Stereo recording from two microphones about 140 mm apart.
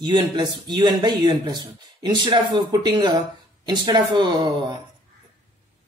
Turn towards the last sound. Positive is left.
turn(degrees=-30)  # may be behind; listen again after turning